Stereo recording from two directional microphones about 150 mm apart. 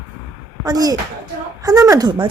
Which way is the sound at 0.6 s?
25° right (ahead or behind).